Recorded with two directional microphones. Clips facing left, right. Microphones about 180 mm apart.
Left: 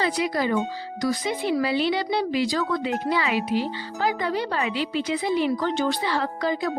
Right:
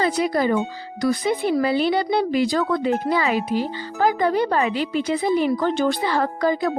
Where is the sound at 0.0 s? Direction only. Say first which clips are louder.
Right 4 dB; 45° right (ahead or behind).